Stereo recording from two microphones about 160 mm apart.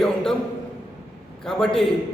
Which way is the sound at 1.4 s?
5° left (ahead or behind).